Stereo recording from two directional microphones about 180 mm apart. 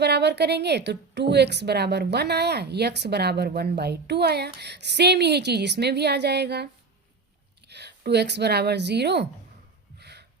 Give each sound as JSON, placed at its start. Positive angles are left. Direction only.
{"t": 0.0, "sound": "a woman's voice", "side_deg": -65}
{"t": 7.7, "sound": "speech", "side_deg": -65}
{"t": 10.0, "sound": "a sound", "side_deg": -65}